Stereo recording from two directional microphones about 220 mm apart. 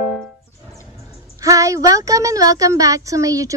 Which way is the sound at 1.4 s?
15° right (ahead or behind).